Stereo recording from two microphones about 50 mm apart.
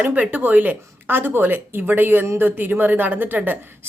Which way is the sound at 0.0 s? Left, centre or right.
Right.